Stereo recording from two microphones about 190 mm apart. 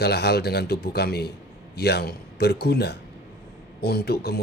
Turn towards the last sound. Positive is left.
turn(degrees=60)  # may be behind; listen again after turning